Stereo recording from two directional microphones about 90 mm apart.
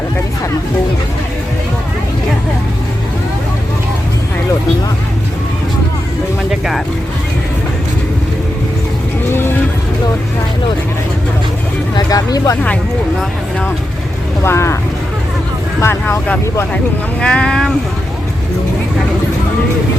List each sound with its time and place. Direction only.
6.5 s speech: 5° right (ahead or behind)
11.9 s speech: 45° left (ahead or behind)
14.4 s speech: 30° left (ahead or behind)
15.8 s speech: 30° left (ahead or behind)
17.2 s speech: 10° left (ahead or behind)